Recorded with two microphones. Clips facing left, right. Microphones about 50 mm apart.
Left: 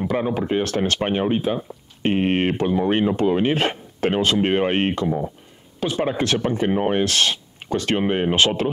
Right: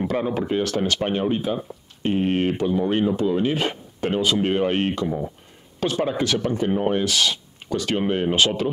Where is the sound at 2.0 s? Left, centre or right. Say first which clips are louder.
Left 2 dB; left.